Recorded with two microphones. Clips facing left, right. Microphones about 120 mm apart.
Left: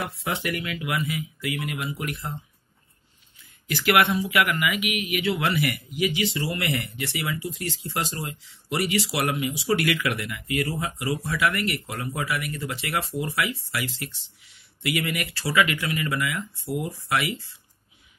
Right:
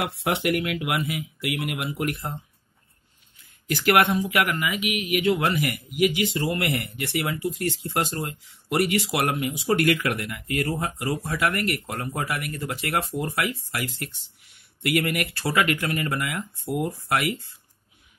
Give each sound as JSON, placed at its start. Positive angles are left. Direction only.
{"t": 0.0, "sound": "speech", "side_deg": -70}
{"t": 2.0, "sound": "speech", "side_deg": -55}
{"t": 3.6, "sound": "speech", "side_deg": -45}
{"t": 4.6, "sound": "speech", "side_deg": -35}
{"t": 4.9, "sound": "speech", "side_deg": -50}